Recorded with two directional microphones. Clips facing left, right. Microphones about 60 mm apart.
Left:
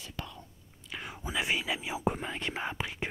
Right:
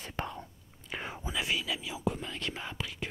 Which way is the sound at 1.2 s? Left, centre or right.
Left.